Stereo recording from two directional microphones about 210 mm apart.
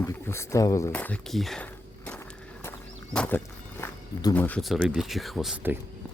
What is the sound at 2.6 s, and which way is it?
Speech, 5° left (ahead or behind).